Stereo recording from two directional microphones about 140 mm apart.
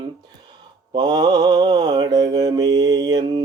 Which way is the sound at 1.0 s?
30° right (ahead or behind).